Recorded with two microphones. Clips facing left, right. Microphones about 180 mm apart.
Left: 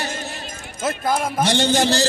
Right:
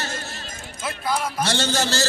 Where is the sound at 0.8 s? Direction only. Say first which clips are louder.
Left 4 dB; 50° left (ahead or behind).